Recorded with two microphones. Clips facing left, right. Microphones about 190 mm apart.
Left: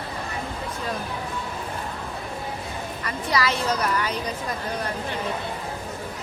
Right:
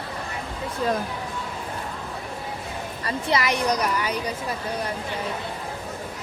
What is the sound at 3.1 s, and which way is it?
A woman's voice, 25° right (ahead or behind).